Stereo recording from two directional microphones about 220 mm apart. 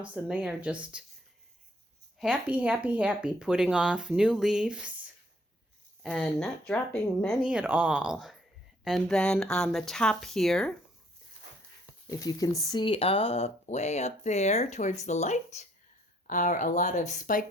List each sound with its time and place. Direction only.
0.0 s speech: 5° right (ahead or behind)
2.1 s speech: 5° right (ahead or behind)
6.0 s speech: centre (ahead or behind)
12.0 s speech: 15° left (ahead or behind); by 17.4 s 35° left (ahead or behind)